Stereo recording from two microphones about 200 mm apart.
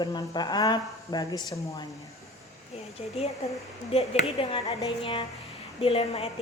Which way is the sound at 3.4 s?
30° left (ahead or behind).